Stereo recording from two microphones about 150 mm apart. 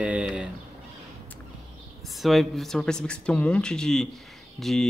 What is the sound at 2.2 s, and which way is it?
Speech, centre (ahead or behind).